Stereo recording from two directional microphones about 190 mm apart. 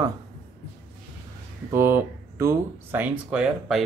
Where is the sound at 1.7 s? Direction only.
10° right (ahead or behind).